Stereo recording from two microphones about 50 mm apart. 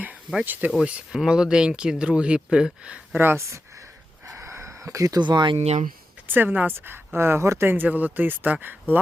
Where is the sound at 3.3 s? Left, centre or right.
Right.